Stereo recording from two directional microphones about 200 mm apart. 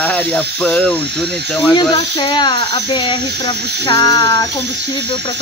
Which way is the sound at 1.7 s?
20° left (ahead or behind).